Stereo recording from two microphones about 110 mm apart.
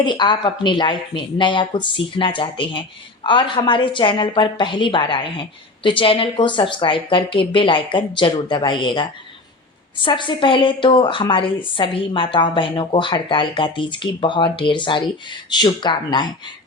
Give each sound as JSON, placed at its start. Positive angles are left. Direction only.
{"t": 0.0, "sound": "a woman's voice", "side_deg": 45}